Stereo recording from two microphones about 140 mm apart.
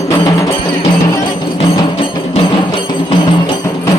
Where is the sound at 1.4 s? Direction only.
40° left (ahead or behind); by 4.0 s 25° left (ahead or behind).